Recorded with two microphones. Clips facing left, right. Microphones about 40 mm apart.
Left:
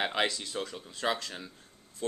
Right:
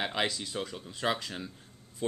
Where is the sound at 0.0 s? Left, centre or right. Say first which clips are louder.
Left 1 dB; centre.